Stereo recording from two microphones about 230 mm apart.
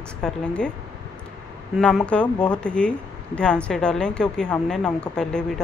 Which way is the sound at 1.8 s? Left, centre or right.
Centre.